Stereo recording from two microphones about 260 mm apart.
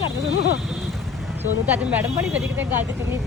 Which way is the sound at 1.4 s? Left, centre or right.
Centre.